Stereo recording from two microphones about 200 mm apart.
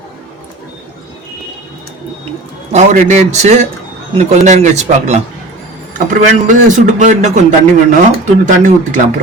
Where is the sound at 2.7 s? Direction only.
40° right (ahead or behind).